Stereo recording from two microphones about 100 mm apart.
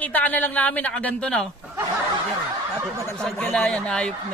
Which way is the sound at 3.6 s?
10° left (ahead or behind).